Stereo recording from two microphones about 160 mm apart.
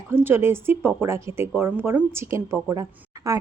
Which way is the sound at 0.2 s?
15° right (ahead or behind).